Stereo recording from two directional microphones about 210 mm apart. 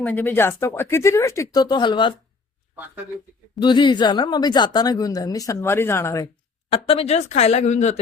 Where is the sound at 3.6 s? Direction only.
20° left (ahead or behind).